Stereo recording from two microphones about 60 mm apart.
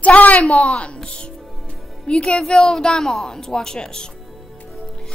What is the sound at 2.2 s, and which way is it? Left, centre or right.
Speech, centre.